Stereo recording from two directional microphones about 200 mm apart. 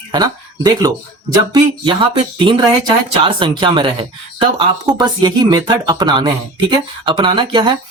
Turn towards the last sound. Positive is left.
turn(degrees=-25)  # may be behind; listen again after turning